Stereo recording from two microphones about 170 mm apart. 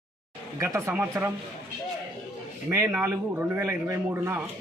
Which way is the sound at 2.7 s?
15° right (ahead or behind).